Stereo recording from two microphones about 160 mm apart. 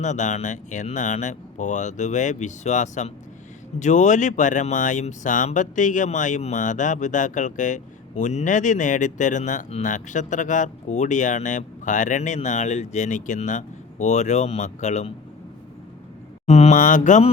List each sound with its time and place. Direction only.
0.0 s speech: 50° left (ahead or behind)
16.5 s speech: 45° left (ahead or behind)